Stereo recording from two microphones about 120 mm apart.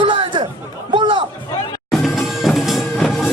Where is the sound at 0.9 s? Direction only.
45° right (ahead or behind).